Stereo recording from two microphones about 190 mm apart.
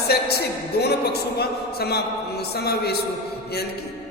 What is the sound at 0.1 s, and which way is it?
A man's voice, 60° left (ahead or behind).